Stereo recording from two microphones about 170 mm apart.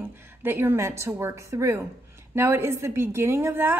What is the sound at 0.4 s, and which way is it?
A woman's voice, 10° right (ahead or behind).